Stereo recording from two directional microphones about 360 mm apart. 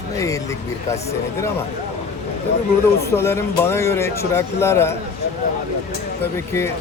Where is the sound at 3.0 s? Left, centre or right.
Centre.